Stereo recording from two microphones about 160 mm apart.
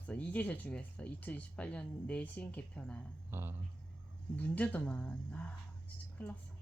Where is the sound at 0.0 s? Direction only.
10° left (ahead or behind).